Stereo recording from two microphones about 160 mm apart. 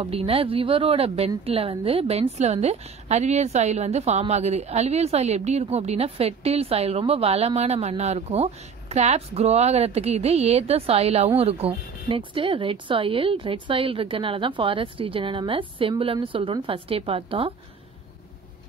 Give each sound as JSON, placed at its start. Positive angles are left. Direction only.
{"t": 0.0, "sound": "a woman's voice", "side_deg": -35}